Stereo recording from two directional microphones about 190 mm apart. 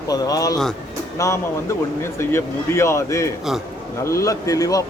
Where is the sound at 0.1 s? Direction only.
20° left (ahead or behind).